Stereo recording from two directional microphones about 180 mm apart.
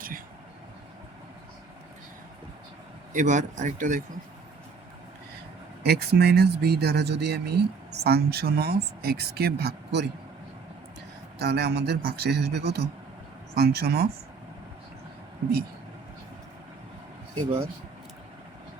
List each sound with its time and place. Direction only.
3.1 s speech: 45° right (ahead or behind)
5.8 s speech: 65° right (ahead or behind)
11.3 s speech: 65° right (ahead or behind)